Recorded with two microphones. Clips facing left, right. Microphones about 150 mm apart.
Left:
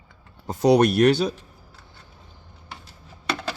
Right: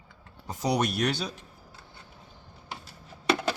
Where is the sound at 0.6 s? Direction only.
60° left (ahead or behind).